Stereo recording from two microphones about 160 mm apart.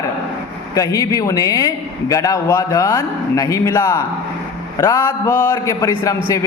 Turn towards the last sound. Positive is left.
turn(degrees=20)  # may be behind; listen again after turning